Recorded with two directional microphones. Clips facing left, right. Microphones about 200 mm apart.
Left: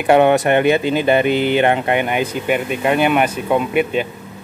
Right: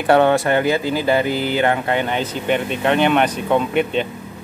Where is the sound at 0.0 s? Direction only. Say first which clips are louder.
Left 2 dB; 15° left (ahead or behind).